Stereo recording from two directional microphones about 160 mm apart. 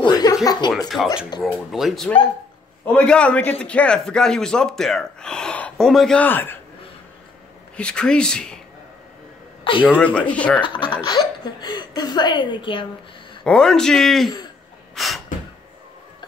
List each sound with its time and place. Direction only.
0.0 s chuckle: 25° left (ahead or behind)
0.8 s a man's voice: centre (ahead or behind)
7.7 s a man's voice: 5° left (ahead or behind)
9.9 s speech: 10° left (ahead or behind)
10.6 s a woman's voice: 30° left (ahead or behind)
13.4 s a man's voice: 5° left (ahead or behind)
15.0 s gasp: centre (ahead or behind)